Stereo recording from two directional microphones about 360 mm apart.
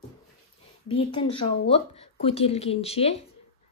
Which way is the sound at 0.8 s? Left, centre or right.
Centre.